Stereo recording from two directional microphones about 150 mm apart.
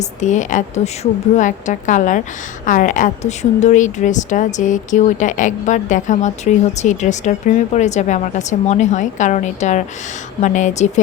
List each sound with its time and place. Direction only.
0.2 s a woman's voice: 55° left (ahead or behind)